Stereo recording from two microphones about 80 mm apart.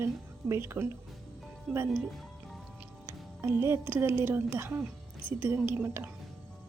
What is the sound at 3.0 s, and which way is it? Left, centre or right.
Music, right.